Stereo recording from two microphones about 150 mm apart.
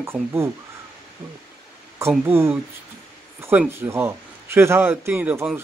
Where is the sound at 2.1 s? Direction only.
15° right (ahead or behind).